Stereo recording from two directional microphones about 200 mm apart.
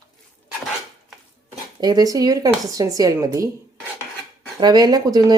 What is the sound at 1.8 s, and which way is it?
Speech, 20° right (ahead or behind).